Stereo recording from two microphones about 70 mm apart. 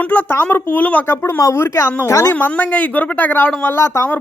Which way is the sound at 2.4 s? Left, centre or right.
Left.